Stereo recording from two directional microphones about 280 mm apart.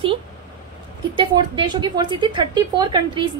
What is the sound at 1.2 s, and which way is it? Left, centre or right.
Speech, centre.